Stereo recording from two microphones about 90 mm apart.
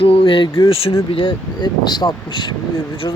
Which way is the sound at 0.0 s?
90° left.